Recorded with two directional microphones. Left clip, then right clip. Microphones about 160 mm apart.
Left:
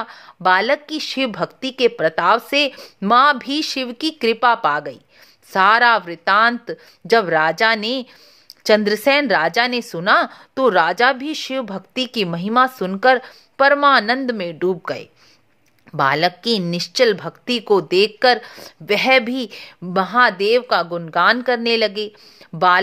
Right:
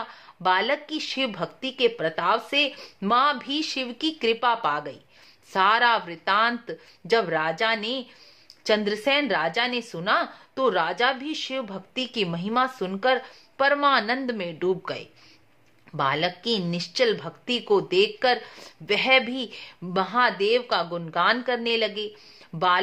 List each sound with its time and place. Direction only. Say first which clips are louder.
0.0 s speech: left 7 dB; 35° left (ahead or behind)